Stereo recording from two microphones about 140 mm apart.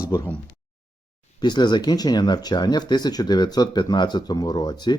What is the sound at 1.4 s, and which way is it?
Speech, 30° left (ahead or behind).